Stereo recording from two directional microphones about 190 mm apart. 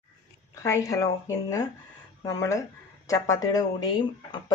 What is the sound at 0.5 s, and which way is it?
Speech, 15° left (ahead or behind).